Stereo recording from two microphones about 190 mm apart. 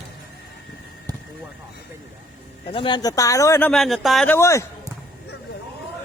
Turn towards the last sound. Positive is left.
turn(degrees=15)  # may be behind; listen again after turning